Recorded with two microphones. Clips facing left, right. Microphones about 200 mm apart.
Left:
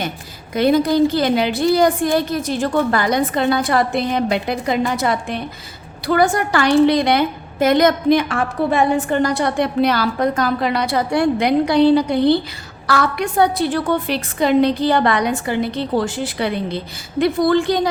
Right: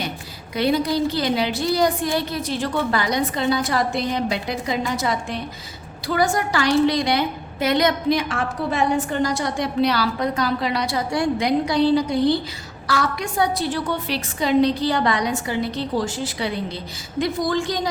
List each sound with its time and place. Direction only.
0.5 s a woman's voice: 50° left (ahead or behind)